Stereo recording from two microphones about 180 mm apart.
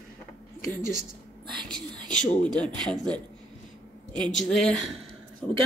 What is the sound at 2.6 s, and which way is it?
Speech, 5° left (ahead or behind).